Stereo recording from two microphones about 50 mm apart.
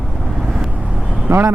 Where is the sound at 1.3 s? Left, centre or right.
Right.